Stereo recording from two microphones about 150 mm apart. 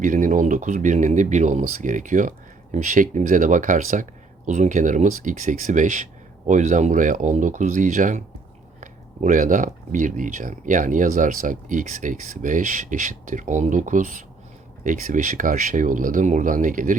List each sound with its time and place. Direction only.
0.0 s speech: 60° right (ahead or behind)